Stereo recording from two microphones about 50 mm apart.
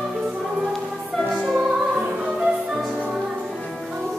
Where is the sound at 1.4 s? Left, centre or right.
Centre.